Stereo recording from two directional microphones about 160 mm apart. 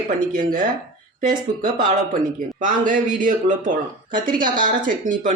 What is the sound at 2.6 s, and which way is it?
Speech, 55° right (ahead or behind).